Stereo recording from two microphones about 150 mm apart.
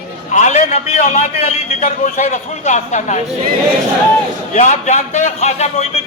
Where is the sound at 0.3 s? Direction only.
55° left (ahead or behind).